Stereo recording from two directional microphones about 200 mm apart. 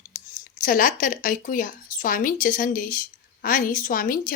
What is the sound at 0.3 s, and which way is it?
A woman's voice, 45° left (ahead or behind).